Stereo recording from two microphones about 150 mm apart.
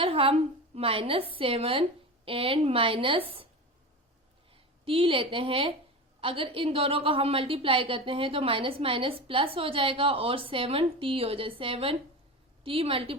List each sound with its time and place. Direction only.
0.0 s a woman's voice: 40° right (ahead or behind)
4.5 s a woman's voice: 35° right (ahead or behind)